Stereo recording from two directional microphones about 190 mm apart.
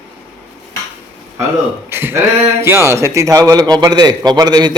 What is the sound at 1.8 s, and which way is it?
A man's voice, 10° right (ahead or behind).